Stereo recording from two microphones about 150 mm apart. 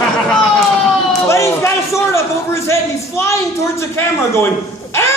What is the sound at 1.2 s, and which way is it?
A man's voice, 20° left (ahead or behind).